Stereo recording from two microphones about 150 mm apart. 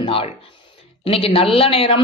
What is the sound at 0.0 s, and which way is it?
A man's voice, 40° left (ahead or behind).